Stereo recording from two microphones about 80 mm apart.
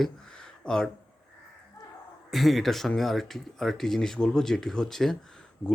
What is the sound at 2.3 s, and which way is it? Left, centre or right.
A man's voice, centre.